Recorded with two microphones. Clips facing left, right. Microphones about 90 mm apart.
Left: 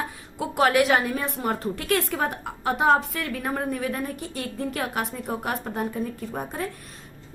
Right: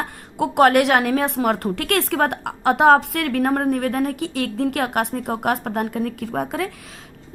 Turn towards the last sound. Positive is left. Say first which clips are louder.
# right 6 dB
turn(degrees=-80)